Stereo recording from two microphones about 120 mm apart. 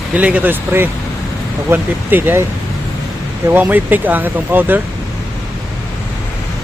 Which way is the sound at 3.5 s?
15° right (ahead or behind).